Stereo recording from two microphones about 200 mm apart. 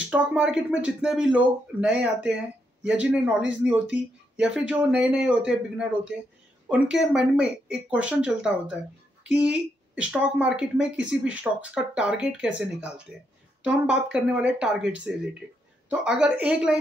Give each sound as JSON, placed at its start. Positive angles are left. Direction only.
{"t": 0.1, "sound": "speech", "side_deg": -5}
{"t": 14.1, "sound": "speech", "side_deg": -5}